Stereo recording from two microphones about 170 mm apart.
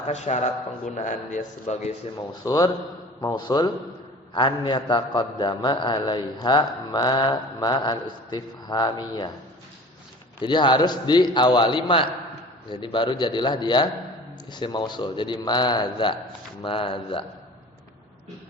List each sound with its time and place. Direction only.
0.1 s a man's voice: 45° left (ahead or behind)
2.4 s a man's voice: 20° left (ahead or behind)
10.4 s a man's voice: 25° left (ahead or behind)